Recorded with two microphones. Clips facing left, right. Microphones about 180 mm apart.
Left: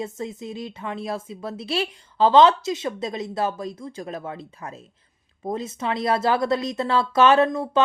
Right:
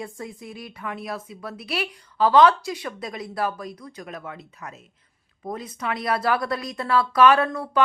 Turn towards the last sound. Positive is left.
turn(degrees=20)  # may be behind; listen again after turning